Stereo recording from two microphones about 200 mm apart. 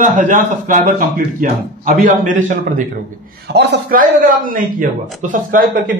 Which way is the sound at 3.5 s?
55° right (ahead or behind).